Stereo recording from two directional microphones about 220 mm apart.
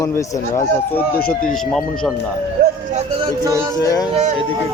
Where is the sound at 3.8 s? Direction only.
15° left (ahead or behind).